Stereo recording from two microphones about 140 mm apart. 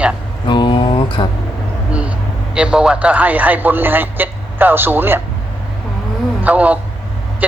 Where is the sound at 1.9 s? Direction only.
10° right (ahead or behind).